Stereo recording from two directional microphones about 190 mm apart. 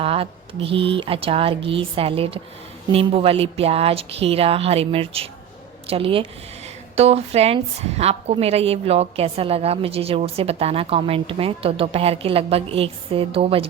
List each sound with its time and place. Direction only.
0.0 s a woman's voice: 30° right (ahead or behind)